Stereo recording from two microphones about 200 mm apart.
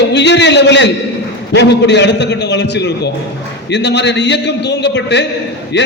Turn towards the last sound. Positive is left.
turn(degrees=60)  # may be behind; listen again after turning